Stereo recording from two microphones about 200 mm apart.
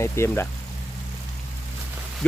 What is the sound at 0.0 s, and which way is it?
Speech, 15° left (ahead or behind).